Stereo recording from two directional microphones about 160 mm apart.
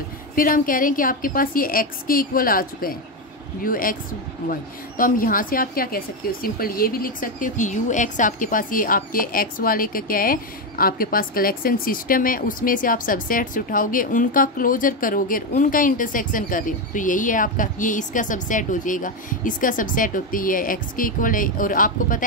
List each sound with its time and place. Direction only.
0.4 s a woman's voice: 60° left (ahead or behind)